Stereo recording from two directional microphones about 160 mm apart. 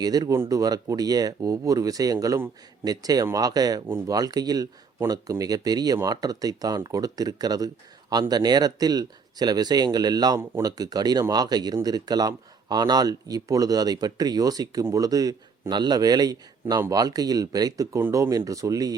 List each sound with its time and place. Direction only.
0.0 s speech: 25° right (ahead or behind)